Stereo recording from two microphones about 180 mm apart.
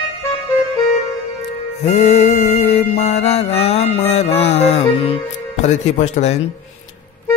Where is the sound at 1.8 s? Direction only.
35° left (ahead or behind).